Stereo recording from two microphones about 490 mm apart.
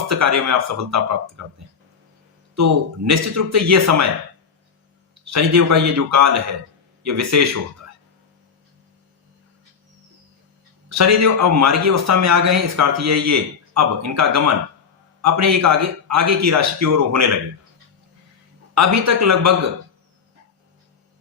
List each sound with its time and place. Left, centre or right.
0.1 s a man's voice: right
5.2 s a man's voice: right
10.8 s a man's voice: right
18.7 s a man's voice: right